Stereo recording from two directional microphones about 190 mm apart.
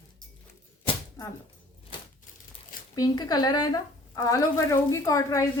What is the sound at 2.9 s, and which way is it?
A woman's voice, 20° left (ahead or behind).